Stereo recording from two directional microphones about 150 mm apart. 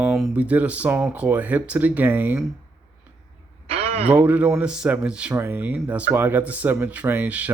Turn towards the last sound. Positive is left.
turn(degrees=-10)  # may be behind; listen again after turning